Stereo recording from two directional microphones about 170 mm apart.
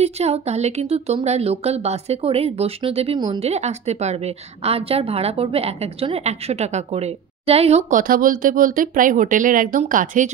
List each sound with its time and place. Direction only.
0.0 s a woman's voice: 40° right (ahead or behind)
8.0 s speech: 55° right (ahead or behind)